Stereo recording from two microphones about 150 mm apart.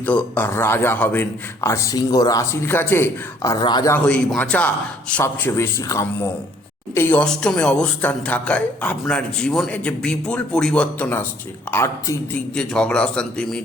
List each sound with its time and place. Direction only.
0.0 s speech: 10° left (ahead or behind); by 3.9 s 30° left (ahead or behind)
3.9 s a man's voice: 10° left (ahead or behind)